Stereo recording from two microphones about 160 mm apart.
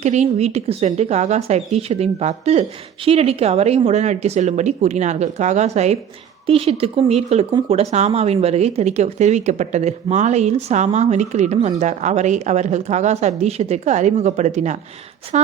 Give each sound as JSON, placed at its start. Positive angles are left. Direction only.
{"t": 0.0, "sound": "speech", "side_deg": -45}